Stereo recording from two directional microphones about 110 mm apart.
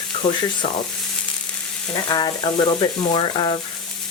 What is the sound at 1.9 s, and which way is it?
Frying, 40° left (ahead or behind).